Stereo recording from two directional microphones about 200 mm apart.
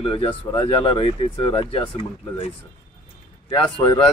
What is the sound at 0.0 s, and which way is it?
Speech, 25° left (ahead or behind).